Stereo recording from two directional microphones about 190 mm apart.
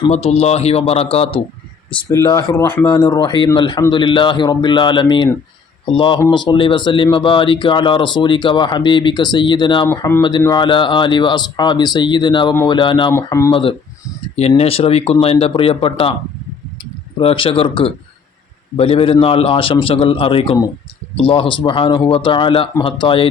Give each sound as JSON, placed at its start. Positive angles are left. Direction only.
{"t": 0.1, "sound": "speech", "side_deg": 35}
{"t": 2.0, "sound": "speech", "side_deg": 15}
{"t": 13.5, "sound": "speech", "side_deg": 25}
{"t": 17.2, "sound": "speech", "side_deg": 30}